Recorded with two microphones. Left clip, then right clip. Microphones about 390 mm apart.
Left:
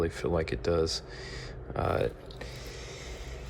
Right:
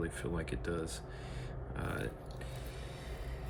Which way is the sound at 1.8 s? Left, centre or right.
Centre.